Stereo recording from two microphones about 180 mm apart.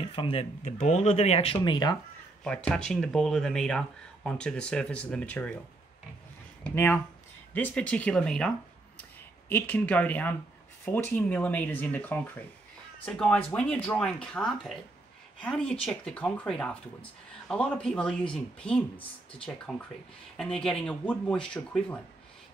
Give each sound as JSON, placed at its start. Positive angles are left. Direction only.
{"t": 0.1, "sound": "speech", "side_deg": 30}
{"t": 2.4, "sound": "speech", "side_deg": 5}
{"t": 6.6, "sound": "speech", "side_deg": 10}